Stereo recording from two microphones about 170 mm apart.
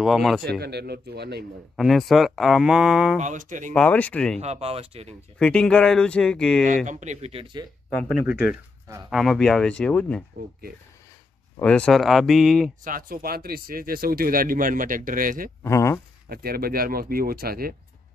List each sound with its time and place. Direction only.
0.0 s speech: centre (ahead or behind)
0.5 s a man's voice: 70° right (ahead or behind)
1.8 s speech: centre (ahead or behind)
3.2 s speech: 45° right (ahead or behind)
3.7 s speech: 5° left (ahead or behind)
4.4 s speech: 40° right (ahead or behind)
5.4 s speech: 5° left (ahead or behind)
6.9 s speech: 45° right (ahead or behind)
8.3 s speech: 5° right (ahead or behind)
11.6 s speech: 5° left (ahead or behind)
12.8 s speech: 55° right (ahead or behind)
15.6 s speech: 15° left (ahead or behind)
16.3 s speech: 60° right (ahead or behind)